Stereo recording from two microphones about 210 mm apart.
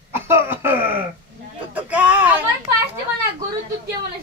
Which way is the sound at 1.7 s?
5° right (ahead or behind).